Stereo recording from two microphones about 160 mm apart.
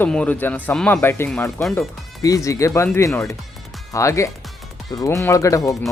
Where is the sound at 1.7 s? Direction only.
20° left (ahead or behind).